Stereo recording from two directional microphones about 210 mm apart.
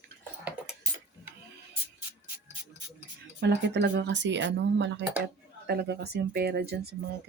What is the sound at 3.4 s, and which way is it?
Speech, 55° right (ahead or behind).